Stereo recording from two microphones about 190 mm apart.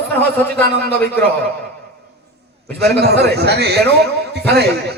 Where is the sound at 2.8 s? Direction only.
55° right (ahead or behind).